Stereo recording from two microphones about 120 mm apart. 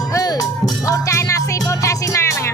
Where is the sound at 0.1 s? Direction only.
30° left (ahead or behind).